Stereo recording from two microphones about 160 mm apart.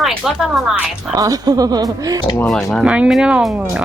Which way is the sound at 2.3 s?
5° left (ahead or behind).